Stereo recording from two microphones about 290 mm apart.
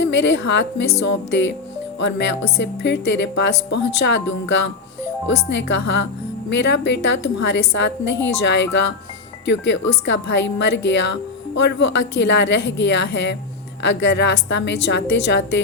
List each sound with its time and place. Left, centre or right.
0.0 s speech: left